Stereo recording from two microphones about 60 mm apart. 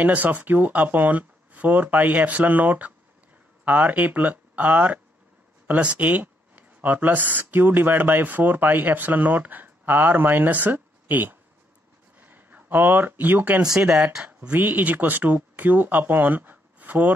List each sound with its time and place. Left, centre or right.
0.0 s speech: right
12.2 s a sound: right
14.1 s speech: centre
14.6 s speech: right